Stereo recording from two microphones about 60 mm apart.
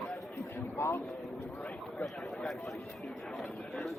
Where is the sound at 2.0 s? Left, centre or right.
Centre.